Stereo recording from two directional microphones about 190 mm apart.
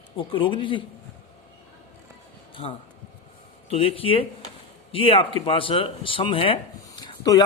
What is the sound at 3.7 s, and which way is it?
Speech, 30° left (ahead or behind).